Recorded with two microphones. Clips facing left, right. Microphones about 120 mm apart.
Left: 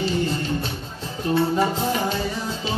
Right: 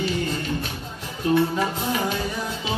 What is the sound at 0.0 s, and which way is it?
Music, 30° left (ahead or behind).